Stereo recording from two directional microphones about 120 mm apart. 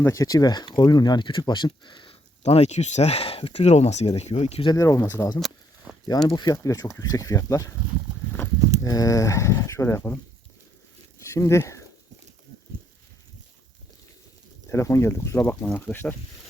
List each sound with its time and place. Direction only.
0.0 s speech: 25° left (ahead or behind)
2.4 s speech: 65° left (ahead or behind)
4.6 s speech: 30° left (ahead or behind)
5.9 s a sound: 10° right (ahead or behind)
6.2 s speech: 30° left (ahead or behind)
8.8 s speech: 30° left (ahead or behind)
11.2 s a sound: 25° left (ahead or behind)
14.7 s speech: 20° left (ahead or behind)